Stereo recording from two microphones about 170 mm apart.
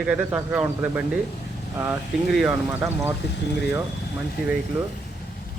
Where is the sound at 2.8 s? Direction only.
15° right (ahead or behind).